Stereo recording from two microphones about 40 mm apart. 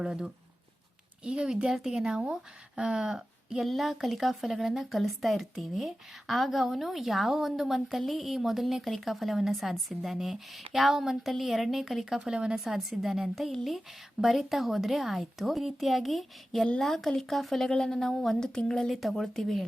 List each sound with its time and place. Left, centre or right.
0.0 s speech: centre
1.7 s speech: centre
2.0 s speech: right
3.1 s a woman's voice: centre
12.2 s speech: centre
12.5 s a woman's voice: centre
17.7 s speech: centre
18.9 s a woman's voice: centre